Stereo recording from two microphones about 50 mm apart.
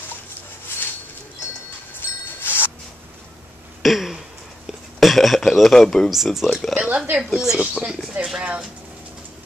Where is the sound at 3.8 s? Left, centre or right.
Centre.